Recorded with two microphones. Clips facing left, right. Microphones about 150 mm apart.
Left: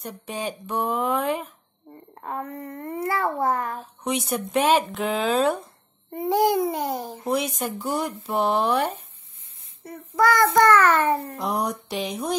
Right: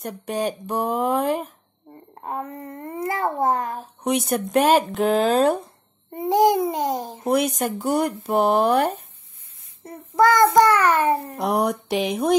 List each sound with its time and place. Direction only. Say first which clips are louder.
0.0 s speech: right 6 dB; 50° right (ahead or behind)
2.1 s a child's voice: right 1 dB; 20° right (ahead or behind)
4.0 s speech: right 4 dB; 50° right (ahead or behind)
6.1 s a child's voice: right 3 dB; 20° right (ahead or behind)
7.2 s speech: right 5 dB; 55° right (ahead or behind)
9.8 s a child's voice: right 3 dB; 25° right (ahead or behind)
11.3 s a sound: right 5 dB; 65° right (ahead or behind)